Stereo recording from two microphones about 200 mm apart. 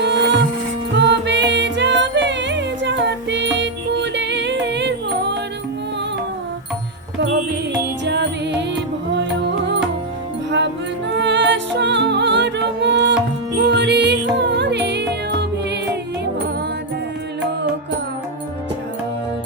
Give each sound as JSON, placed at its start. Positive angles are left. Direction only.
{"t": 0.0, "sound": "music", "side_deg": -60}
{"t": 8.0, "sound": "music", "side_deg": -60}
{"t": 11.1, "sound": "music", "side_deg": -60}